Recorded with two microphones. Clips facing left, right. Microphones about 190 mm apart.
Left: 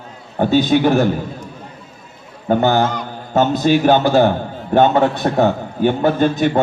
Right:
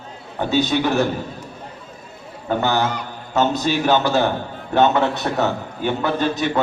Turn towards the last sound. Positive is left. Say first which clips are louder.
# left 6 dB
turn(degrees=50)  # may be behind; listen again after turning